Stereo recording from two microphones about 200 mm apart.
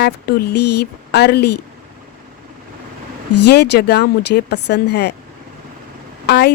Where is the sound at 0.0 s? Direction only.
50° left (ahead or behind).